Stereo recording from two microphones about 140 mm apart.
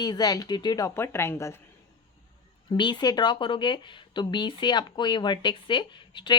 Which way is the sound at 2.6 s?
30° left (ahead or behind).